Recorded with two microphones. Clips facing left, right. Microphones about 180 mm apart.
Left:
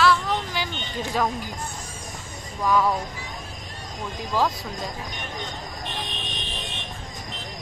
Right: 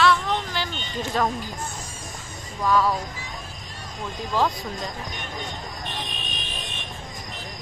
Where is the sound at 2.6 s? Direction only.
15° left (ahead or behind).